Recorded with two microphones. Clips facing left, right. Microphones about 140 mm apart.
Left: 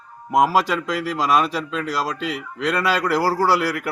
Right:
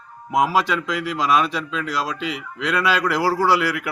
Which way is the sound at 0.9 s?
40° left (ahead or behind).